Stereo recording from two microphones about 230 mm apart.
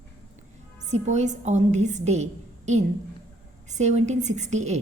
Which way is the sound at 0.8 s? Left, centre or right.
Right.